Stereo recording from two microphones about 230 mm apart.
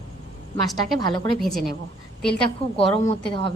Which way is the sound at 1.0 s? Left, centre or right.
Centre.